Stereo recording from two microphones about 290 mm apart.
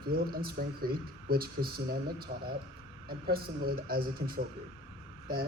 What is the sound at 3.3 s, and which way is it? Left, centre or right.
Speech, right.